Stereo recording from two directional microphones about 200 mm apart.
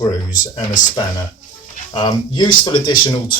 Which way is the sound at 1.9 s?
25° left (ahead or behind).